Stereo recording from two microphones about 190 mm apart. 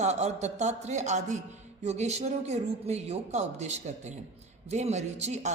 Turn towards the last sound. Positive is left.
turn(degrees=-35)  # may be behind; listen again after turning